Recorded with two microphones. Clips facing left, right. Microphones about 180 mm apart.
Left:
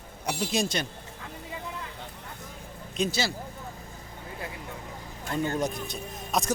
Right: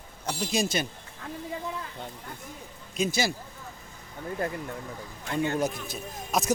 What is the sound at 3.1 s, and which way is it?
Speech, 15° right (ahead or behind).